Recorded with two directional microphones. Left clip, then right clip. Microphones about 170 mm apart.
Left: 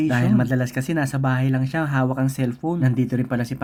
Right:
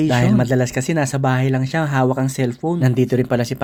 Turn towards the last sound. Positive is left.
turn(degrees=-35)  # may be behind; listen again after turning